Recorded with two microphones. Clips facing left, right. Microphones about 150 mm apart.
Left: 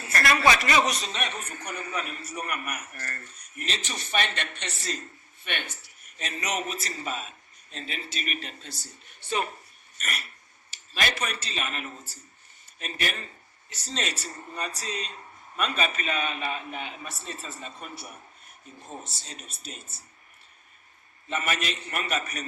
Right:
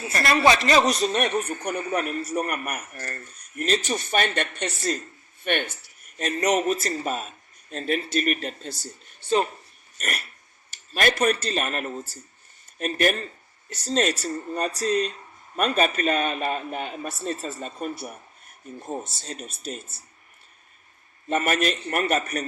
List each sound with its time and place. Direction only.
0.1 s a woman's voice: 25° right (ahead or behind); by 8.7 s 45° right (ahead or behind)
10.7 s a man's voice: 50° right (ahead or behind)
21.2 s a man's voice: 45° right (ahead or behind)